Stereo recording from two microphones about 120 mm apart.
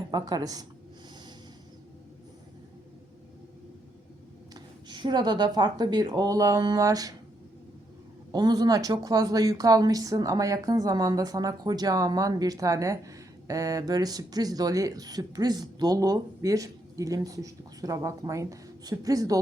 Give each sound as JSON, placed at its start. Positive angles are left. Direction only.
{"t": 0.1, "sound": "speech", "side_deg": -35}
{"t": 4.5, "sound": "speech", "side_deg": -40}
{"t": 8.3, "sound": "speech", "side_deg": -35}